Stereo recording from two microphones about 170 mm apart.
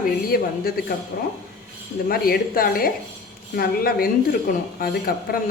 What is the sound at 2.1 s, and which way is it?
A woman's voice, 60° left (ahead or behind).